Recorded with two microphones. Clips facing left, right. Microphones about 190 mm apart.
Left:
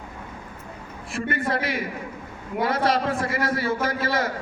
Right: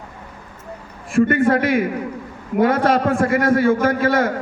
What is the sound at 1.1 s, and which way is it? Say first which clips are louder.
A man's voice: right 11 dB; 50° right (ahead or behind).